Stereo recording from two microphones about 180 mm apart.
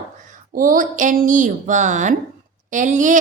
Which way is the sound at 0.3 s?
50° right (ahead or behind).